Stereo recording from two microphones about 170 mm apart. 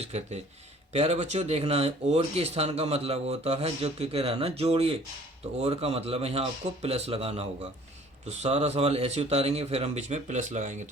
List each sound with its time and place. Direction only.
0.0 s speech: 40° right (ahead or behind)